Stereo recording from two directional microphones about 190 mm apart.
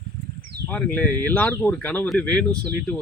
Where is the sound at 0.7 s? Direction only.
10° left (ahead or behind).